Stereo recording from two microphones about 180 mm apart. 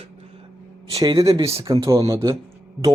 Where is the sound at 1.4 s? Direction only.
20° right (ahead or behind).